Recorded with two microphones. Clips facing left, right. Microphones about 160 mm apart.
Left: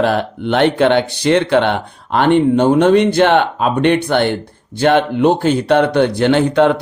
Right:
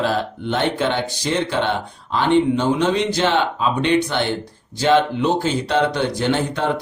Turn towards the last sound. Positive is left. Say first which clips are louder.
# left 8 dB
turn(degrees=70)  # may be behind; listen again after turning